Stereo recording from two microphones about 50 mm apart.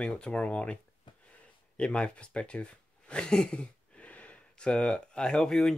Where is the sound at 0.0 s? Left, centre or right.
Left.